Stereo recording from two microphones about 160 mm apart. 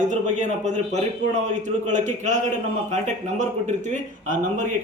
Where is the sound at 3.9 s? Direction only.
50° right (ahead or behind).